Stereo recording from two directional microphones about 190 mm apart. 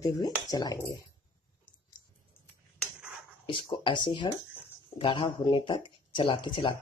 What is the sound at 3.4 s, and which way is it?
Speech, 25° left (ahead or behind).